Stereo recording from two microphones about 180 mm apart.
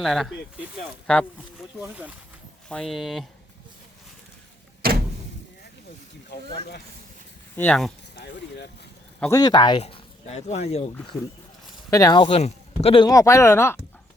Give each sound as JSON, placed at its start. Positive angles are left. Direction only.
{"t": 0.0, "sound": "speech", "side_deg": 0}
{"t": 4.8, "sound": "door", "side_deg": -55}
{"t": 7.5, "sound": "speech", "side_deg": 10}
{"t": 8.2, "sound": "speech", "side_deg": 65}
{"t": 9.3, "sound": "speech", "side_deg": 20}
{"t": 9.8, "sound": "speech", "side_deg": 35}
{"t": 11.9, "sound": "speech", "side_deg": 20}
{"t": 12.3, "sound": "speech", "side_deg": 35}